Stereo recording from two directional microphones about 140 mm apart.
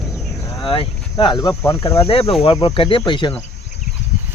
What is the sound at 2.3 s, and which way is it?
Speech, 45° left (ahead or behind).